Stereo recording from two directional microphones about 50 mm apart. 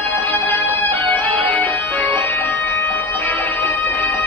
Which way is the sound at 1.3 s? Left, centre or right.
Left.